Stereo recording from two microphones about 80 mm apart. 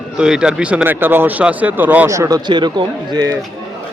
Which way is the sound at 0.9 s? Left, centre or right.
Right.